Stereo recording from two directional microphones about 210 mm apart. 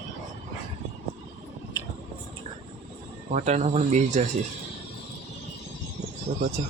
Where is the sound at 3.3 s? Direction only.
35° right (ahead or behind).